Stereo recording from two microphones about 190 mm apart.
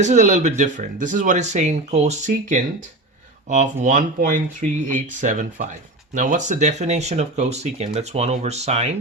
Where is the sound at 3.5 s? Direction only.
40° right (ahead or behind).